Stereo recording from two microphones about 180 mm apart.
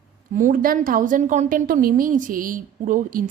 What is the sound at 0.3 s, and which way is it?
A woman's voice, 50° right (ahead or behind).